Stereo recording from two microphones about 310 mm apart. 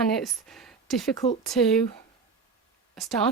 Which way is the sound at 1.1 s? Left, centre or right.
Centre.